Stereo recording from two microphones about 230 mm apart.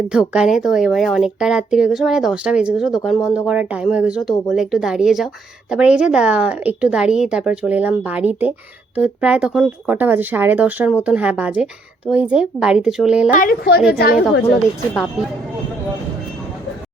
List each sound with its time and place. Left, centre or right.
0.1 s speech: centre
13.3 s speech: left
14.9 s speech: centre